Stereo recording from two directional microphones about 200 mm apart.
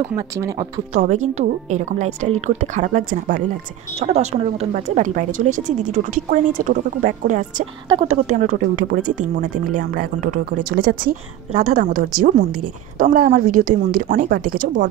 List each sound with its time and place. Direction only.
0.9 s a woman's voice: 35° right (ahead or behind)